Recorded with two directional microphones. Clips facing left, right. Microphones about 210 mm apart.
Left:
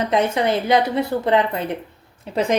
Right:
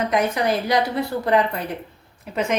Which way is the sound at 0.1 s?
25° left (ahead or behind).